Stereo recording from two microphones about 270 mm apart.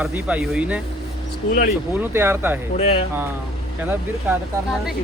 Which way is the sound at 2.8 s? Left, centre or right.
Left.